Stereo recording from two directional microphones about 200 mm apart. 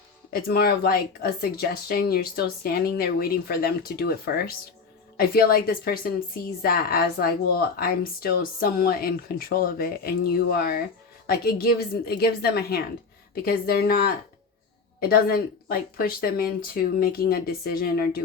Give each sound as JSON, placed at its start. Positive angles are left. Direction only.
{"t": 0.4, "sound": "a woman's voice", "side_deg": 50}